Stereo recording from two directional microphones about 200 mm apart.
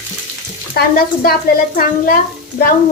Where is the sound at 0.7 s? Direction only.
50° left (ahead or behind).